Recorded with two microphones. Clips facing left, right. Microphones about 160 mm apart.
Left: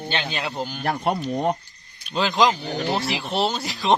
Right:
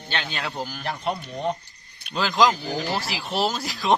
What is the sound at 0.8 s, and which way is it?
Speech, 50° left (ahead or behind).